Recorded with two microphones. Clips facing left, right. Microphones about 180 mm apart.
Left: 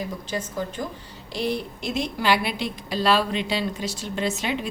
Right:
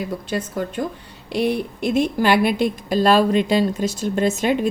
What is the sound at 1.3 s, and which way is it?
A woman's voice, 60° right (ahead or behind).